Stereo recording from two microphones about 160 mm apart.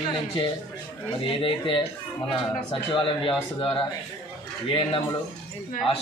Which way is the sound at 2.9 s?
30° left (ahead or behind).